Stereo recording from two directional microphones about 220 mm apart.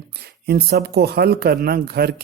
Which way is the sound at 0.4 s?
45° right (ahead or behind).